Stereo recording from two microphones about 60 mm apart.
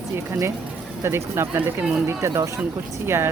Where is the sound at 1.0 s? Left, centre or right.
Right.